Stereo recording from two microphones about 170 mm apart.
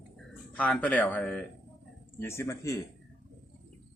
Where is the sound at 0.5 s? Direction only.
10° left (ahead or behind).